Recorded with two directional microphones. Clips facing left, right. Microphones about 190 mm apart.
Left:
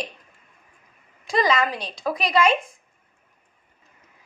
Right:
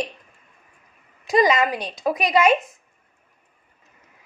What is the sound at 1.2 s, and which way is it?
A woman's voice, 15° right (ahead or behind).